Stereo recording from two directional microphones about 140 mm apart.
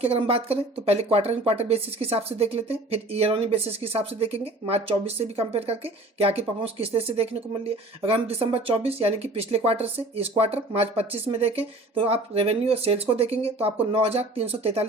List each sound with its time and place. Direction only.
0.0 s speech: 45° right (ahead or behind)